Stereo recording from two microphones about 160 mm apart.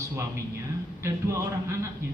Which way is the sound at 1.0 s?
20° right (ahead or behind).